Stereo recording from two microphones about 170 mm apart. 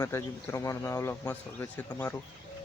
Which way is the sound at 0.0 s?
15° left (ahead or behind).